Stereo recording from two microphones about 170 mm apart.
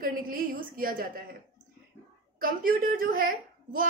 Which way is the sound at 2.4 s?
55° right (ahead or behind).